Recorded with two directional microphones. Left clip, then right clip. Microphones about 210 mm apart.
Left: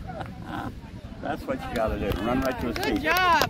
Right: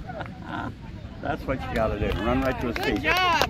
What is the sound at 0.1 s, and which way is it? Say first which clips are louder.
Pig: right 1 dB; 30° right (ahead or behind).